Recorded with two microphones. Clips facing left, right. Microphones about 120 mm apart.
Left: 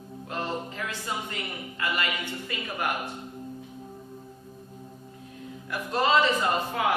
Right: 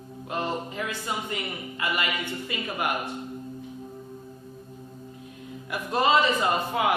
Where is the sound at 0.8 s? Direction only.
15° right (ahead or behind).